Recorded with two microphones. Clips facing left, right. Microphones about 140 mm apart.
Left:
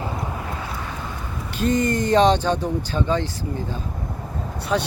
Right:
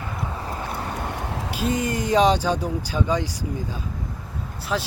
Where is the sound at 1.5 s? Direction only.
10° right (ahead or behind).